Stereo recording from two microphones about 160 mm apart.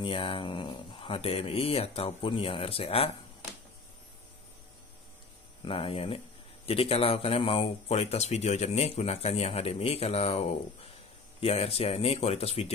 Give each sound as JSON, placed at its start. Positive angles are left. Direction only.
{"t": 0.0, "sound": "speech", "side_deg": 35}
{"t": 5.7, "sound": "speech", "side_deg": 35}
{"t": 11.4, "sound": "speech", "side_deg": 40}